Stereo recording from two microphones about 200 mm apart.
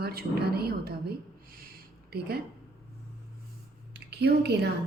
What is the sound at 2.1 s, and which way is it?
Speech, 50° right (ahead or behind).